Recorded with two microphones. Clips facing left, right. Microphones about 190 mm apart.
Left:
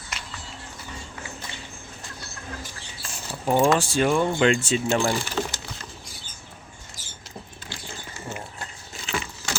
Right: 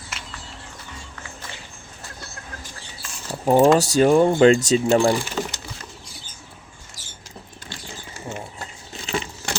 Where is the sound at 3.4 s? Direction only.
40° right (ahead or behind).